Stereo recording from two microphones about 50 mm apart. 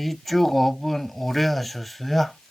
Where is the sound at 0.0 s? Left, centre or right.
Centre.